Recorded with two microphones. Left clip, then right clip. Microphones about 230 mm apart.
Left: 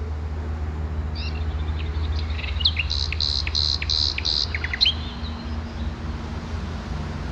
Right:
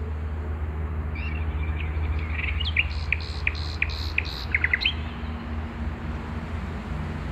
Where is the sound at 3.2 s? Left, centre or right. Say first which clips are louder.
Left 8 dB; centre.